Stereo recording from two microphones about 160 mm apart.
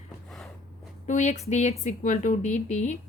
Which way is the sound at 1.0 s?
50° left (ahead or behind).